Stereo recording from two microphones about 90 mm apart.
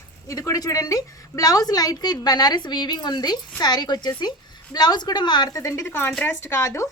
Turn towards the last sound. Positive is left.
turn(degrees=30)  # may be behind; listen again after turning